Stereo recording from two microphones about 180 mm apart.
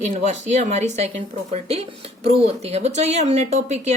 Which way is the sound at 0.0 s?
40° right (ahead or behind).